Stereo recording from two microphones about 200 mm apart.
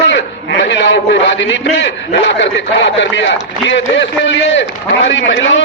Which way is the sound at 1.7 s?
60° left (ahead or behind).